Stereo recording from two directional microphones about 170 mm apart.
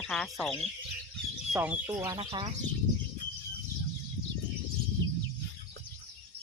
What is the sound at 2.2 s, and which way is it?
Speech, 30° right (ahead or behind).